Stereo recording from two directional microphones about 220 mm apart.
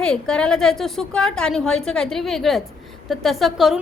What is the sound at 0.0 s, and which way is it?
A woman's voice, 5° left (ahead or behind).